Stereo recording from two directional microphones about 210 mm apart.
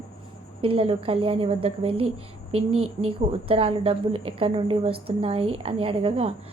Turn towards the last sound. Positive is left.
turn(degrees=-25)  # may be behind; listen again after turning